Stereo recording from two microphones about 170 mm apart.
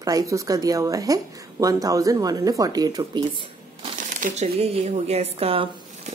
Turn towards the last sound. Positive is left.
turn(degrees=-35)  # may be behind; listen again after turning